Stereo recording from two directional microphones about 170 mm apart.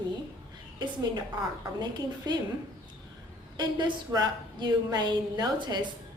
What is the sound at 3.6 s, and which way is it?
A woman's voice, 25° right (ahead or behind).